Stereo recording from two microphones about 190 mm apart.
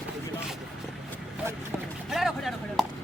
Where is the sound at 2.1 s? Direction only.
Centre (ahead or behind).